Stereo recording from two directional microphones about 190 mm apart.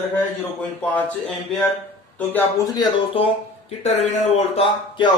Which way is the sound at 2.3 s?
20° left (ahead or behind).